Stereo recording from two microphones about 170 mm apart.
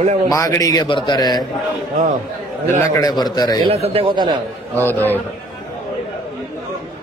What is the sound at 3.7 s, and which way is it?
Speech, 35° right (ahead or behind).